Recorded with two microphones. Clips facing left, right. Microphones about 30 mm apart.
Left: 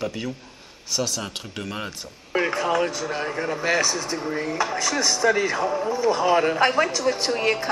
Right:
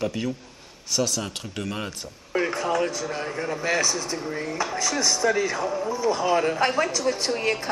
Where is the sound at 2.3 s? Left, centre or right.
Centre.